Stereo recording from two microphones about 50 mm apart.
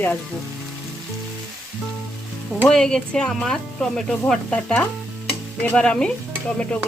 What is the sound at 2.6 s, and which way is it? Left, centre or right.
Speech, centre.